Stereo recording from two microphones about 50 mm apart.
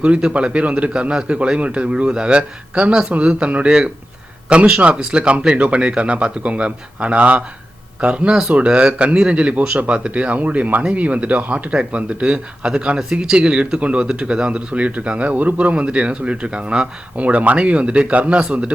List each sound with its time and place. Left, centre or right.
0.0 s speech: centre
8.3 s speech: centre